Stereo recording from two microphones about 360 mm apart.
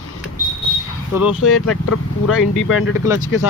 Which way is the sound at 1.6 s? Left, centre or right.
Left.